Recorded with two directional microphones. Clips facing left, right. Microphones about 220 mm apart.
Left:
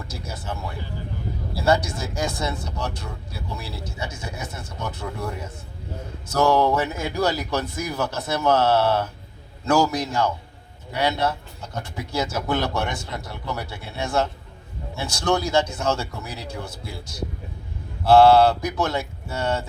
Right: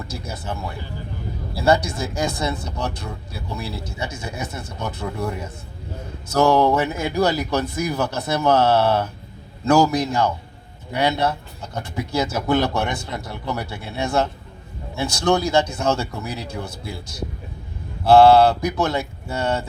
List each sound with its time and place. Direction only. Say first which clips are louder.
0.1 s speech: right 2 dB; 15° right (ahead or behind)
1.6 s speech: right 3 dB; 15° right (ahead or behind)
6.3 s speech: right 3 dB; 20° right (ahead or behind)